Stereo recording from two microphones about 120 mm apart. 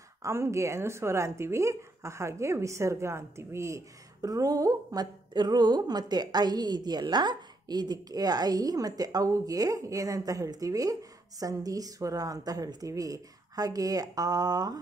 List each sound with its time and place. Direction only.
0.2 s speech: 25° right (ahead or behind)